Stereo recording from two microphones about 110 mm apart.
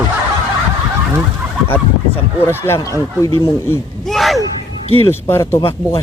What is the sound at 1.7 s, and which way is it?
Speech, 20° left (ahead or behind).